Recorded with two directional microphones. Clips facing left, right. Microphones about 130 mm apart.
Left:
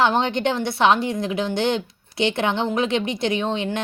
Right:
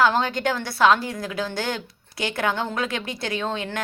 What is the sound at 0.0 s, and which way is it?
A woman's voice, 25° left (ahead or behind).